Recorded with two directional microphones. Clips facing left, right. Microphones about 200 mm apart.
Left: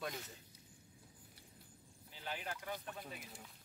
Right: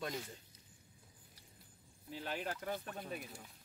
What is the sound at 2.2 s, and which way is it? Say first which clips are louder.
Speech: right 4 dB; 50° right (ahead or behind).